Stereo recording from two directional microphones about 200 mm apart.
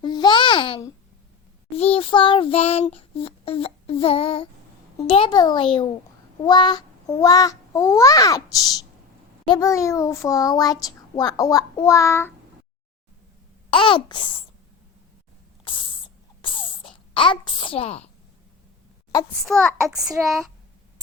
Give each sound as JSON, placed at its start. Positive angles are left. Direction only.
{"t": 0.0, "sound": "babbling", "side_deg": 20}
{"t": 1.7, "sound": "child singing", "side_deg": 30}
{"t": 6.4, "sound": "a child's voice", "side_deg": 20}
{"t": 13.7, "sound": "child singing", "side_deg": 25}
{"t": 15.7, "sound": "spray", "side_deg": 25}
{"t": 16.4, "sound": "sneeze", "side_deg": 25}
{"t": 17.2, "sound": "child singing", "side_deg": 25}
{"t": 19.4, "sound": "child singing", "side_deg": 0}